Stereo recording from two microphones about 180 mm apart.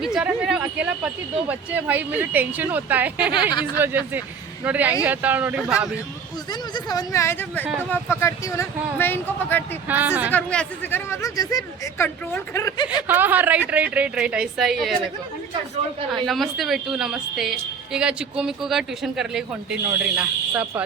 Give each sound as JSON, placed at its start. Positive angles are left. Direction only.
{"t": 0.0, "sound": "a woman's voice", "side_deg": -5}
{"t": 6.5, "sound": "speech", "side_deg": 20}
{"t": 9.9, "sound": "speech", "side_deg": -10}
{"t": 10.3, "sound": "speech", "side_deg": 5}
{"t": 13.0, "sound": "speech", "side_deg": -10}
{"t": 16.1, "sound": "a woman's voice", "side_deg": 0}